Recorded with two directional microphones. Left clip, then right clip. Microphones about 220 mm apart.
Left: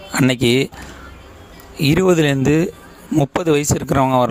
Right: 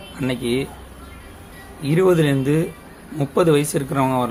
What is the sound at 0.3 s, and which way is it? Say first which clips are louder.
Speech: left 5 dB; 50° left (ahead or behind).